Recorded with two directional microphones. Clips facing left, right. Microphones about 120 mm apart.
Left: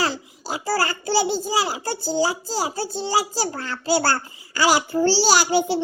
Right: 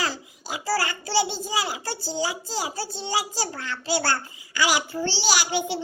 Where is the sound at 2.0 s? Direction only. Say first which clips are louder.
Left 7 dB; 30° left (ahead or behind).